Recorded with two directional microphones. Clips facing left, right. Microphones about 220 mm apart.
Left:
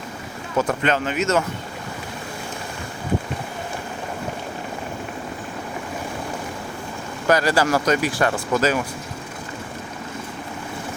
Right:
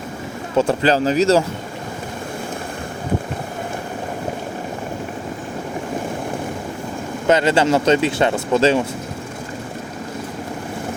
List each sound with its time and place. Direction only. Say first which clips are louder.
0.5 s a man's voice: right 5 dB; 30° right (ahead or behind)
7.3 s speech: right 3 dB; 25° right (ahead or behind)